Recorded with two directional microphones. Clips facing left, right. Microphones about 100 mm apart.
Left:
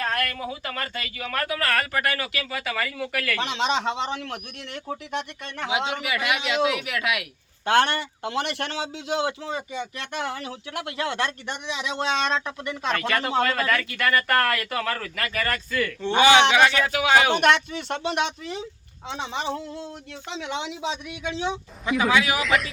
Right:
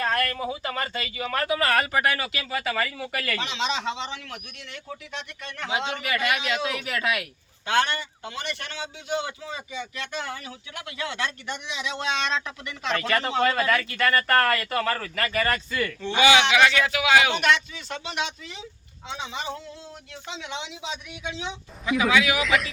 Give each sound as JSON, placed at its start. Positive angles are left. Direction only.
{"t": 0.0, "sound": "speech", "side_deg": 0}
{"t": 3.3, "sound": "speech", "side_deg": 50}
{"t": 5.5, "sound": "a man's voice", "side_deg": 15}
{"t": 6.7, "sound": "speech", "side_deg": 5}
{"t": 7.6, "sound": "a man's voice", "side_deg": 55}
{"t": 10.0, "sound": "speech", "side_deg": 60}
{"t": 11.9, "sound": "speech", "side_deg": 40}
{"t": 12.9, "sound": "speech", "side_deg": 0}
{"t": 16.1, "sound": "speech", "side_deg": 40}
{"t": 20.5, "sound": "speech", "side_deg": 55}
{"t": 21.8, "sound": "speech", "side_deg": 0}
{"t": 22.1, "sound": "speech", "side_deg": 35}
{"t": 22.4, "sound": "speech", "side_deg": 0}